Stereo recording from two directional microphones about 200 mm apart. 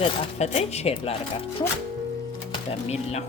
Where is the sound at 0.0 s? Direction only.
35° left (ahead or behind).